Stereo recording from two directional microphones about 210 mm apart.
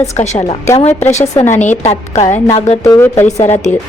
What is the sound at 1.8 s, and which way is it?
Speech, 30° left (ahead or behind).